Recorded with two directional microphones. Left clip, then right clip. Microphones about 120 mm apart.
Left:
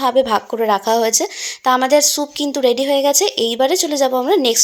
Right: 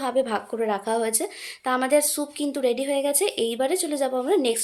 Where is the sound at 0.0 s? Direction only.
30° left (ahead or behind).